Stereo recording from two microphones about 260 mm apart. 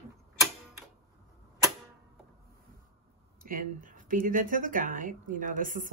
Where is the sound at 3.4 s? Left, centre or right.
Right.